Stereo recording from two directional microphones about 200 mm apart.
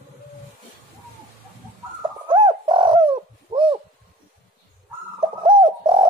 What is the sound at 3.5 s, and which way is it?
Owl, 25° right (ahead or behind).